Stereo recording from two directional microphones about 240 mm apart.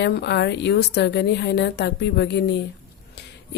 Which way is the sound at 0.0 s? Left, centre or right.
Left.